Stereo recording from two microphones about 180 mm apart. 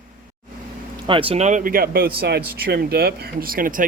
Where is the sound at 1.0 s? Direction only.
30° right (ahead or behind).